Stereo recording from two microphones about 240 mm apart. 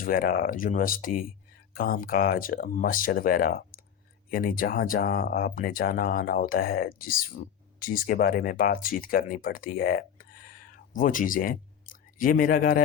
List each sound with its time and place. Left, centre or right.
0.0 s speech: left